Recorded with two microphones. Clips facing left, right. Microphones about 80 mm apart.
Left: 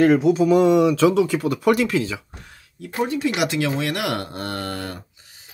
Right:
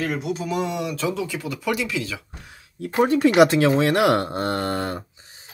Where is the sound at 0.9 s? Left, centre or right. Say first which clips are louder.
Left 9 dB; left.